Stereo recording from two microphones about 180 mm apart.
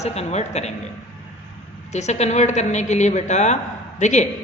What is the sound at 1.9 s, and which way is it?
A man's voice, 40° left (ahead or behind).